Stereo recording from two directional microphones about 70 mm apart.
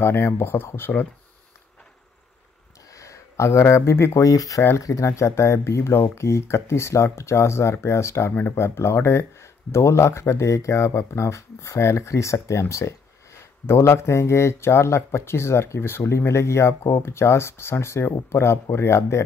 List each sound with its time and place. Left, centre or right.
0.0 s speech: left
2.9 s a sound: left
4.2 s speech: left